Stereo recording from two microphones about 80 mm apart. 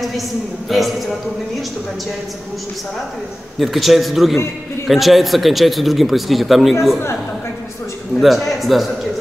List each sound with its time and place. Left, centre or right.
0.7 s speech: centre
3.5 s speech: centre
8.2 s speech: centre